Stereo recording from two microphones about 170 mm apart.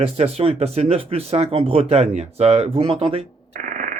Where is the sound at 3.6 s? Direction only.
55° right (ahead or behind).